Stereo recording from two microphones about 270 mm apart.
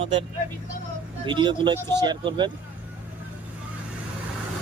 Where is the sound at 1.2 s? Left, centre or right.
Centre.